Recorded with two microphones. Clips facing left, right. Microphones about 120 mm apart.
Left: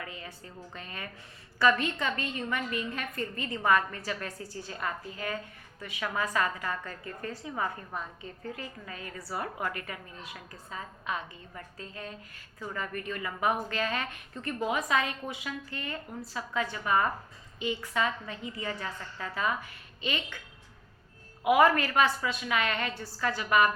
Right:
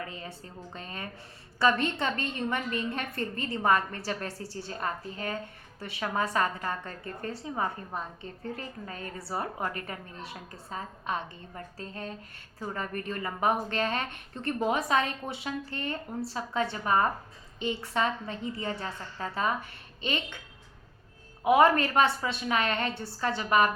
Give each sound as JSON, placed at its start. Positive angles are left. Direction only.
{"t": 0.0, "sound": "a woman's voice", "side_deg": -30}
{"t": 21.4, "sound": "a woman's voice", "side_deg": -25}